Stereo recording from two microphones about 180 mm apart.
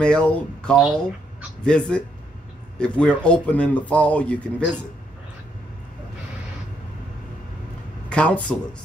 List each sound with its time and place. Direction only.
0.0 s speech: 5° left (ahead or behind)
8.1 s speech: 5° left (ahead or behind)